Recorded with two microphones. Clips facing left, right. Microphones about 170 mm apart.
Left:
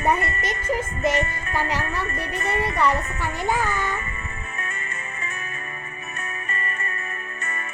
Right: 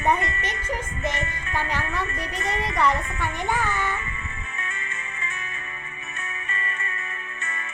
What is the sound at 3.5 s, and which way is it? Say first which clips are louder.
Child singing: left 2 dB; 10° left (ahead or behind).